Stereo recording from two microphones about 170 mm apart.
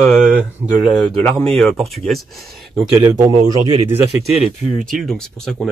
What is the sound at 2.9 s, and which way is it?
Speech, 15° right (ahead or behind).